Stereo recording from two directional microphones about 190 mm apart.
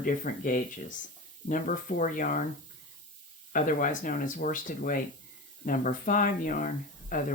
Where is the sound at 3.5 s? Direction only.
45° left (ahead or behind).